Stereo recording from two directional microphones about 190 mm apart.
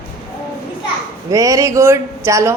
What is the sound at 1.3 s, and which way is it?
Speech, 15° right (ahead or behind).